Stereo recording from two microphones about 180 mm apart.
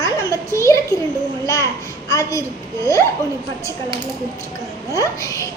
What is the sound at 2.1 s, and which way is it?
Speech, 20° left (ahead or behind).